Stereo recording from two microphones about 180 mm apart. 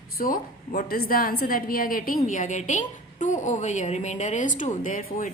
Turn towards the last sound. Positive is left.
turn(degrees=45)  # may be behind; listen again after turning